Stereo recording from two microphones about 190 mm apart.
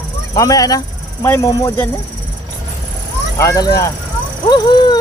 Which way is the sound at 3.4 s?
15° left (ahead or behind).